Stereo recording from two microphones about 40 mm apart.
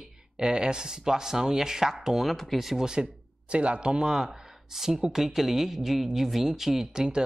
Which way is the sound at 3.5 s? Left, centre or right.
Right.